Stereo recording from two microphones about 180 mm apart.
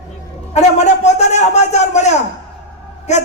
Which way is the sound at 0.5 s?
40° left (ahead or behind).